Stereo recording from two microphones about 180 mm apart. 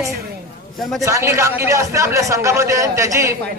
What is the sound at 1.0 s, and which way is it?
Speech, 15° right (ahead or behind).